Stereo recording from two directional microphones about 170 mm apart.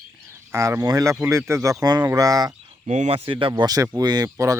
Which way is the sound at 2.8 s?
40° right (ahead or behind).